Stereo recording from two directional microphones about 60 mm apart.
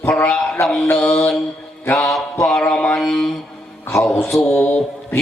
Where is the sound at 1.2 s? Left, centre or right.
Centre.